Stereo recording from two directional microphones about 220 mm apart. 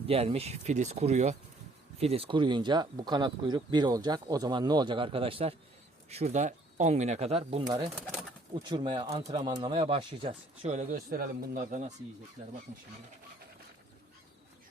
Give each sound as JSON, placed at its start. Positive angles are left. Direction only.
{"t": 0.1, "sound": "speech", "side_deg": -25}